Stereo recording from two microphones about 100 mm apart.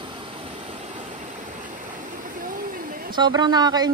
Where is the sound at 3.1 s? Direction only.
45° right (ahead or behind).